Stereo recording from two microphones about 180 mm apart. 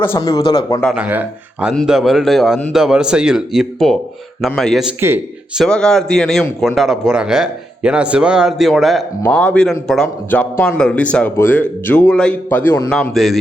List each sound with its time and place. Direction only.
0.0 s speech: 15° left (ahead or behind)
0.9 s a man's voice: 10° right (ahead or behind)
5.6 s a man's voice: 5° left (ahead or behind)